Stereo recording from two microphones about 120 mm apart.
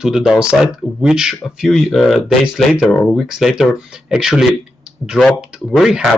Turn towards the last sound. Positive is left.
turn(degrees=0)  # may be behind; listen again after turning